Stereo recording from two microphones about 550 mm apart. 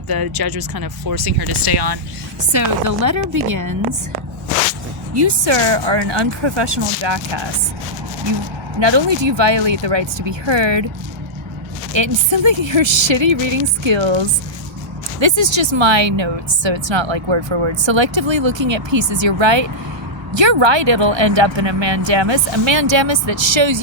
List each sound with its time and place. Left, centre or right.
0.1 s speech: right
2.5 s speech: right
5.1 s a woman's voice: right
8.8 s a woman's voice: right
11.9 s a woman's voice: right